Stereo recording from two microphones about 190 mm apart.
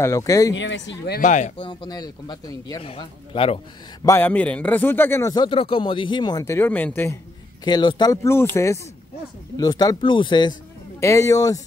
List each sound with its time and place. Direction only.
0.0 s a man's voice: 15° left (ahead or behind)
0.6 s speech: 70° left (ahead or behind)
1.2 s speech: 40° left (ahead or behind)
1.7 s speech: 20° left (ahead or behind)
4.0 s a man's voice: 10° left (ahead or behind)
7.6 s a man's voice: 25° left (ahead or behind)